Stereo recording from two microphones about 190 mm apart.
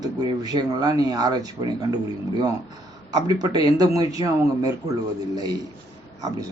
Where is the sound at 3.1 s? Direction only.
20° right (ahead or behind).